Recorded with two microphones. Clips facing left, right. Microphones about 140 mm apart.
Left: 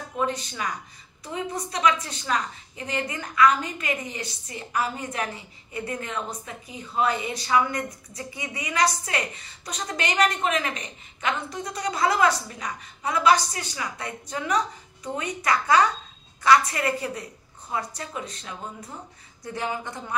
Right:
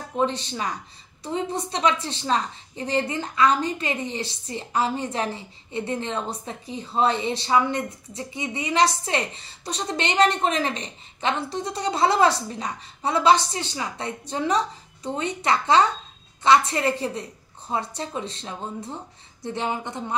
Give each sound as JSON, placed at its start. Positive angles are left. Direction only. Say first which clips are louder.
{"t": 0.1, "sound": "a woman's voice", "louder": "right 3 dB", "side_deg": -30}